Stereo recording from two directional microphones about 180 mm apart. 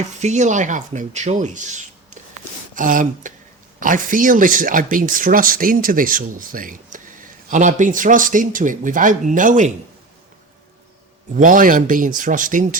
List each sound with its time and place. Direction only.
0.2 s speech: 40° right (ahead or behind)
11.3 s speech: 50° right (ahead or behind)